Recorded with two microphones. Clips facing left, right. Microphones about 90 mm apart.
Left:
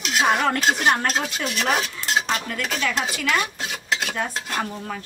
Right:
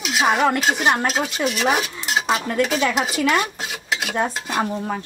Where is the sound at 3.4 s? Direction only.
5° right (ahead or behind).